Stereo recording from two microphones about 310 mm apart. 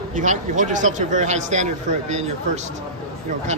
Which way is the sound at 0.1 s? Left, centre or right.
Right.